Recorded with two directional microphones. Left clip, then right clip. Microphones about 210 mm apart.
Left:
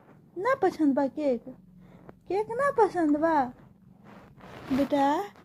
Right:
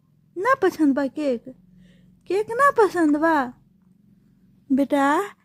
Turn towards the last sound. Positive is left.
turn(degrees=-45)  # may be behind; listen again after turning